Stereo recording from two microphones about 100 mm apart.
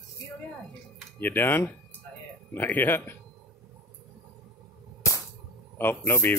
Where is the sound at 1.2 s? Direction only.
20° left (ahead or behind).